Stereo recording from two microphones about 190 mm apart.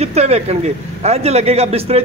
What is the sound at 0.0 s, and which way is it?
A man's voice, 35° right (ahead or behind).